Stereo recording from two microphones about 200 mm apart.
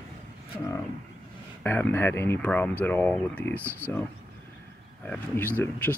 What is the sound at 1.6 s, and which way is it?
Speech, 10° left (ahead or behind).